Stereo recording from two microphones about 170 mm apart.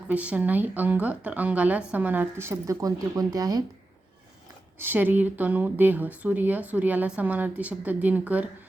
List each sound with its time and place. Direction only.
0.1 s speech: 10° right (ahead or behind)
4.8 s speech: 10° right (ahead or behind)